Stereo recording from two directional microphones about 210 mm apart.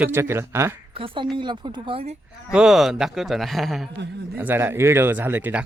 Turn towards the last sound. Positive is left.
turn(degrees=-10)  # may be behind; listen again after turning